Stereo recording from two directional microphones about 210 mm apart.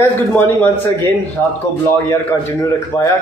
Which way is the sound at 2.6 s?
15° left (ahead or behind).